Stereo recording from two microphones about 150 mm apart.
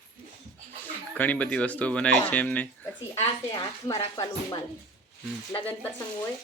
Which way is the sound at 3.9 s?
25° left (ahead or behind).